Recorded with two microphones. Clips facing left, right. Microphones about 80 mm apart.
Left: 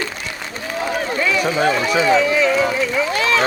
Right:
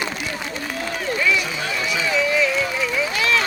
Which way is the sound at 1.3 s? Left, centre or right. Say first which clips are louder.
Left 7 dB; left.